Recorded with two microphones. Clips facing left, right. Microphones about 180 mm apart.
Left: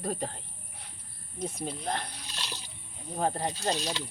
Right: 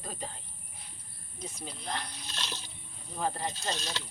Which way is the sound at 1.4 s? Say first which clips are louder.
Left 8 dB; 55° left (ahead or behind).